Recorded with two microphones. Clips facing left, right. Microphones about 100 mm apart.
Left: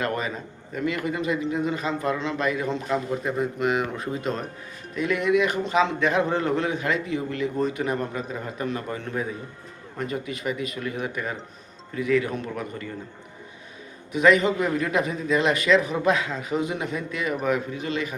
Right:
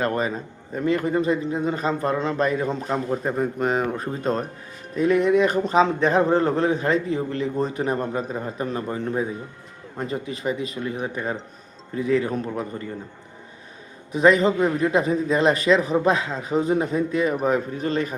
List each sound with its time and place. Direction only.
0.0 s a man's voice: 35° right (ahead or behind)
14.1 s a man's voice: 35° right (ahead or behind)